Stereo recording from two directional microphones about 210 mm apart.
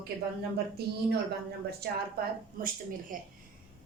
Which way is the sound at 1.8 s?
50° right (ahead or behind).